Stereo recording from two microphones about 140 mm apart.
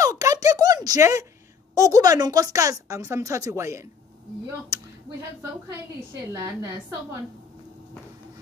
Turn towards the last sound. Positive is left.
turn(degrees=-20)  # may be behind; listen again after turning